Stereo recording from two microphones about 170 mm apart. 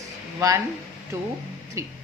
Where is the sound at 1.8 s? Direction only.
15° right (ahead or behind).